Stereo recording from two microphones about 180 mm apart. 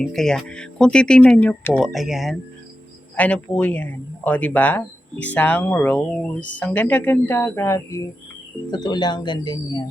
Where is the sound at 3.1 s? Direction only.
10° left (ahead or behind); by 9.8 s 25° left (ahead or behind).